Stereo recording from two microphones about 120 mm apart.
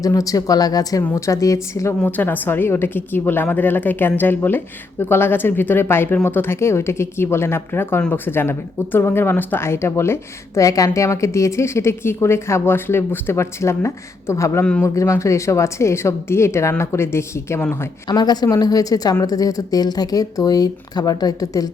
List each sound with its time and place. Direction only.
0.0 s speech: 30° left (ahead or behind)
2.0 s a woman's voice: 15° left (ahead or behind)
14.6 s a woman's voice: 10° left (ahead or behind)
14.8 s speech: 25° left (ahead or behind)
18.1 s speech: 35° left (ahead or behind)